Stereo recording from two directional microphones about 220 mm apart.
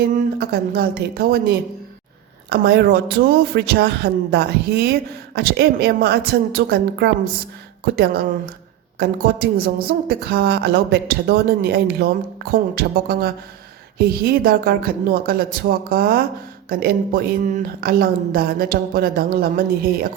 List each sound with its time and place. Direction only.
0.1 s speech: 45° right (ahead or behind)
9.0 s speech: 45° right (ahead or behind)